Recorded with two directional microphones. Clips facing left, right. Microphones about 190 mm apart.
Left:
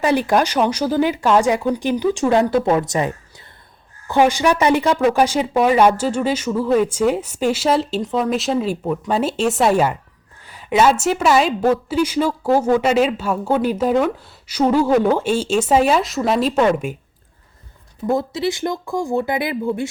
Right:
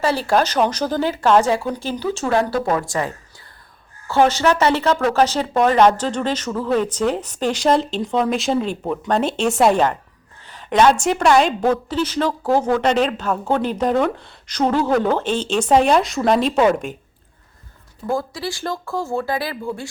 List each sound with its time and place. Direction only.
0.0 s a woman's voice: 15° left (ahead or behind)
4.1 s a woman's voice: 15° left (ahead or behind)
18.0 s speech: 20° left (ahead or behind)